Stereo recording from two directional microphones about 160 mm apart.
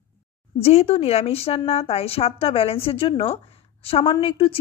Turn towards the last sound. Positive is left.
turn(degrees=35)  # may be behind; listen again after turning